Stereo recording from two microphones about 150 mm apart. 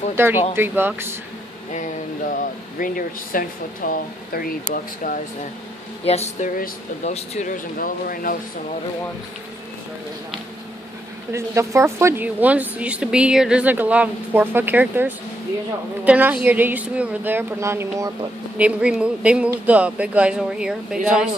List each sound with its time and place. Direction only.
0.1 s speech: 15° right (ahead or behind)
2.8 s speech: 70° left (ahead or behind)
6.0 s speech: 45° left (ahead or behind); by 8.4 s 70° left (ahead or behind)
11.3 s speech: 20° right (ahead or behind)
18.6 s speech: 5° right (ahead or behind)